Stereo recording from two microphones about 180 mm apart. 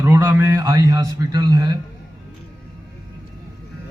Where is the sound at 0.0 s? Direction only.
20° right (ahead or behind).